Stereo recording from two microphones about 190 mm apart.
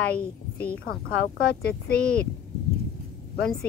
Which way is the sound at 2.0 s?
5° left (ahead or behind).